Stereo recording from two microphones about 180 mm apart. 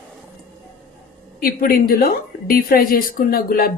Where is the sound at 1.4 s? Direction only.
55° left (ahead or behind).